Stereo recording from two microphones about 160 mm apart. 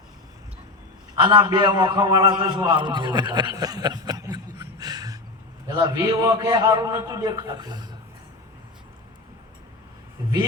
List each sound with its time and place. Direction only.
1.2 s a man's voice: 30° right (ahead or behind)